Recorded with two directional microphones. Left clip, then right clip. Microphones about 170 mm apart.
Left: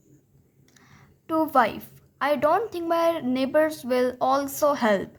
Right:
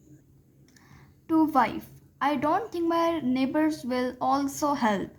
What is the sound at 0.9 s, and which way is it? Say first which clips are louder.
A woman's voice: even; 25° left (ahead or behind).